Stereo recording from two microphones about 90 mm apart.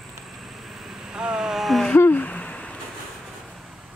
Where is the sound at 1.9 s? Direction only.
20° left (ahead or behind).